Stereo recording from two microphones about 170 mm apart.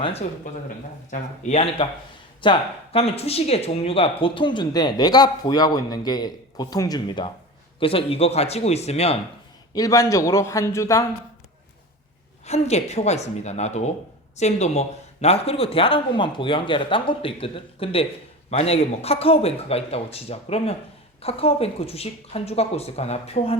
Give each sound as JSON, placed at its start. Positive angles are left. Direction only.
{"t": 0.0, "sound": "speech", "side_deg": 35}
{"t": 7.8, "sound": "speech", "side_deg": 35}
{"t": 9.7, "sound": "speech", "side_deg": 20}
{"t": 12.5, "sound": "speech", "side_deg": 40}